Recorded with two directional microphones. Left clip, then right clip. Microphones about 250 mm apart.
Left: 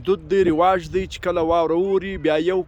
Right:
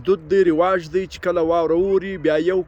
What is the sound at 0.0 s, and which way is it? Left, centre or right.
Speech, centre.